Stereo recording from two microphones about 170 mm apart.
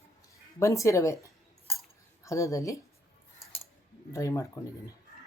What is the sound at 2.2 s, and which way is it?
Speech, 20° left (ahead or behind).